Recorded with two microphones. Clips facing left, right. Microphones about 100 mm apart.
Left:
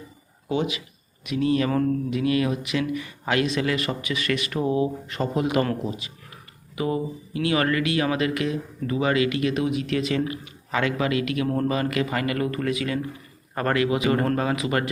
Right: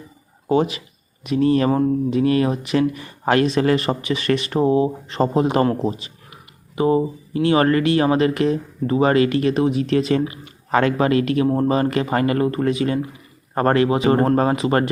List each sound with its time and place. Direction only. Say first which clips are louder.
0.4 s speech: right 7 dB; 40° right (ahead or behind)
1.7 s mantra: right 5 dB; 25° right (ahead or behind)
2.1 s speech: right 5 dB; 35° right (ahead or behind)
11.4 s speech: right 6 dB; 25° right (ahead or behind)